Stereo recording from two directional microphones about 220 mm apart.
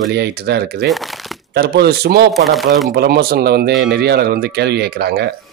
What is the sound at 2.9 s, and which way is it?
Speech, 45° right (ahead or behind).